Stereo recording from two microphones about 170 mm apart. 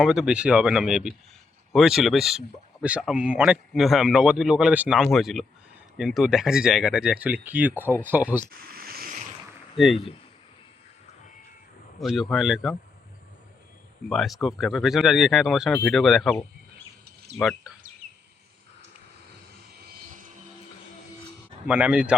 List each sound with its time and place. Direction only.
0.0 s speech: 5° right (ahead or behind)
8.4 s a sound: 60° right (ahead or behind)
9.7 s speech: centre (ahead or behind)
11.9 s speech: centre (ahead or behind)
14.1 s speech: centre (ahead or behind)
21.7 s speech: 5° right (ahead or behind)